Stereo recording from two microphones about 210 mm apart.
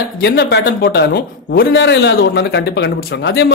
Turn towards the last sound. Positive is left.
turn(degrees=55)  # may be behind; listen again after turning